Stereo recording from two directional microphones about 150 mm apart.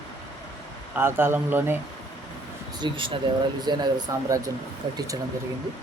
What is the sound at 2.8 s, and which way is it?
Speech, 35° right (ahead or behind).